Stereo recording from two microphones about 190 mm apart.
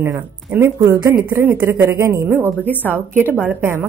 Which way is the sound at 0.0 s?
15° right (ahead or behind).